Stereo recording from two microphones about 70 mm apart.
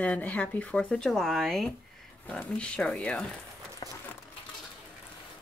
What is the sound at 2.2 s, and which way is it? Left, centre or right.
Speech, centre.